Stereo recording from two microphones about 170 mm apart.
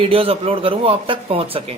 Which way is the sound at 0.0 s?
35° right (ahead or behind).